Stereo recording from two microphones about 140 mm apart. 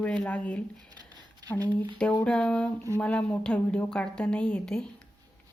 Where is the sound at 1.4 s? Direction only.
25° right (ahead or behind).